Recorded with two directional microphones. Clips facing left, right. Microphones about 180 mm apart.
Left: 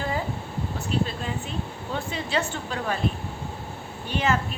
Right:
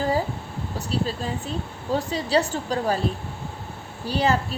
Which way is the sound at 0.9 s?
35° right (ahead or behind).